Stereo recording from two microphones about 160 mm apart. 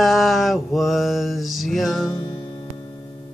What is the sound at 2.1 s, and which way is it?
Music, 25° left (ahead or behind).